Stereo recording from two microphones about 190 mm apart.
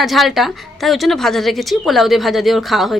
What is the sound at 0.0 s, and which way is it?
Speech, centre (ahead or behind).